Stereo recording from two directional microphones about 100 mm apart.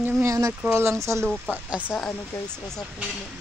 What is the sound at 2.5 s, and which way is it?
Speech, 5° left (ahead or behind).